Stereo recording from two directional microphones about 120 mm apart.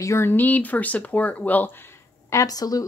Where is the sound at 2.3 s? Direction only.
30° left (ahead or behind).